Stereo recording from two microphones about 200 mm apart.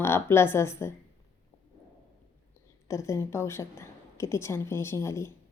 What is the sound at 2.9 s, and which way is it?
A woman's voice, 15° left (ahead or behind).